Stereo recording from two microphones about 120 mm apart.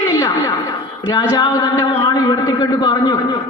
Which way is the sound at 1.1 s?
30° left (ahead or behind).